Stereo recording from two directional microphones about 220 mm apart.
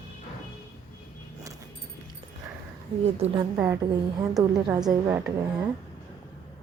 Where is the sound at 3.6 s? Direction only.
15° right (ahead or behind).